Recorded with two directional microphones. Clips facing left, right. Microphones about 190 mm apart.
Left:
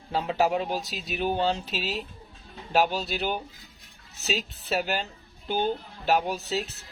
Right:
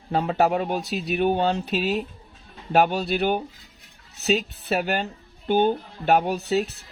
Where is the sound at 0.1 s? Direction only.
55° right (ahead or behind).